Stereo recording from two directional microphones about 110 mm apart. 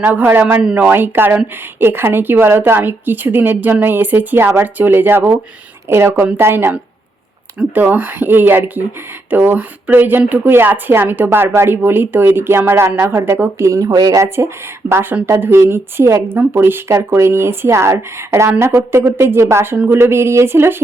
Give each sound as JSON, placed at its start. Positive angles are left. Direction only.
{"t": 0.0, "sound": "a woman's voice", "side_deg": -20}
{"t": 0.9, "sound": "a woman's voice", "side_deg": -20}